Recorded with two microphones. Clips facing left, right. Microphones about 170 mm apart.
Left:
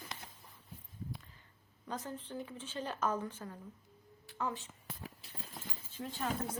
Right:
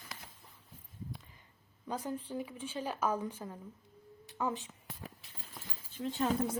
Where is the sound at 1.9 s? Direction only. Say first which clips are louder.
Right 4 dB; 10° right (ahead or behind).